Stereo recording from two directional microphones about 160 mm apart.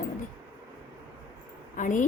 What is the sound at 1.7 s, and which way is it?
Speech, 50° left (ahead or behind).